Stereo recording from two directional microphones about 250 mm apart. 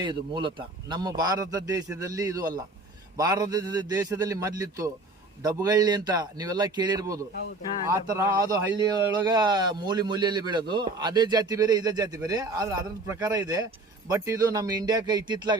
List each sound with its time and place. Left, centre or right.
0.0 s speech: centre